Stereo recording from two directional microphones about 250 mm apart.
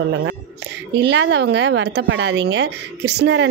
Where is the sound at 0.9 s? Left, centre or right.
Right.